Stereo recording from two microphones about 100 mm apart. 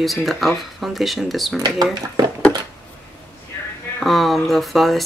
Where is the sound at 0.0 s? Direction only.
Centre (ahead or behind).